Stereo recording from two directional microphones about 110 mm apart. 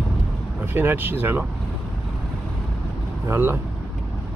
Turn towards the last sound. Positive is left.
turn(degrees=-20)  # may be behind; listen again after turning